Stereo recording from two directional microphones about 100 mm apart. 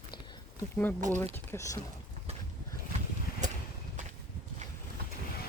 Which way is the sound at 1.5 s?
30° left (ahead or behind).